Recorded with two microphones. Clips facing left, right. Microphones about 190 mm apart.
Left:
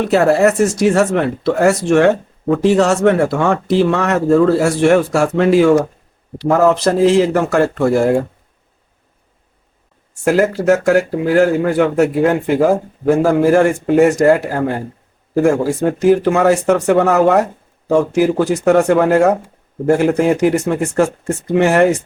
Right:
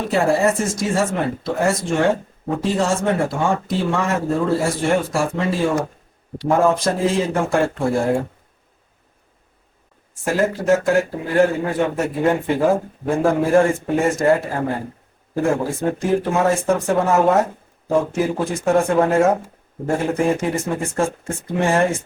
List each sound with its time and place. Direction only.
0.0 s speech: 75° left (ahead or behind)
10.2 s speech: 80° left